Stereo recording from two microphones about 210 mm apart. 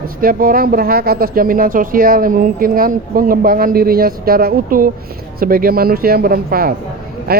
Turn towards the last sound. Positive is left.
turn(degrees=-45)  # may be behind; listen again after turning